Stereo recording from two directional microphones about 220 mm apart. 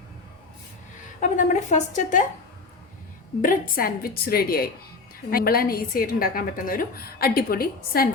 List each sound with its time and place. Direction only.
1.2 s a woman's voice: 35° left (ahead or behind)
3.4 s a woman's voice: 40° left (ahead or behind)